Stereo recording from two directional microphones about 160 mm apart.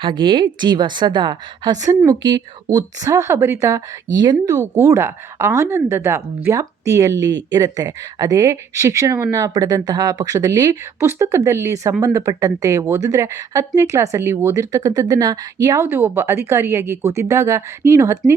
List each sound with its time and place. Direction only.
0.0 s a woman's voice: 30° right (ahead or behind)